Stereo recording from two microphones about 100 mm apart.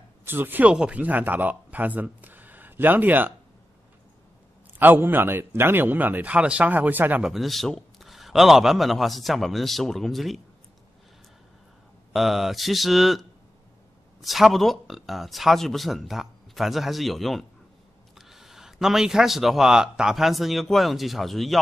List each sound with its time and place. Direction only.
0.2 s speech: 20° right (ahead or behind)
4.7 s a man's voice: 20° right (ahead or behind)
7.2 s speech: centre (ahead or behind)
12.1 s speech: centre (ahead or behind)
14.2 s speech: centre (ahead or behind)